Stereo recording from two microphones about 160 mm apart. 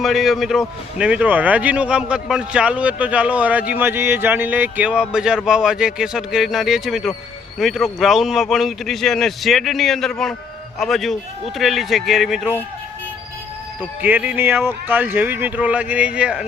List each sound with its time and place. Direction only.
0.0 s a man's voice: centre (ahead or behind)
14.0 s speech: 10° right (ahead or behind)